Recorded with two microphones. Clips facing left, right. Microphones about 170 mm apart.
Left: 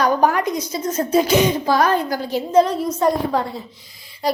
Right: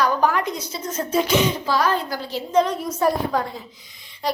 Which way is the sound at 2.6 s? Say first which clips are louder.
Left 3 dB; 30° left (ahead or behind).